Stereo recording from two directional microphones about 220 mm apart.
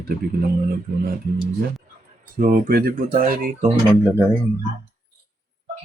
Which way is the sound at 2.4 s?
40° right (ahead or behind).